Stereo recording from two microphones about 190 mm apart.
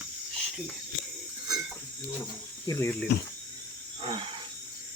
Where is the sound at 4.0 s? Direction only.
25° right (ahead or behind).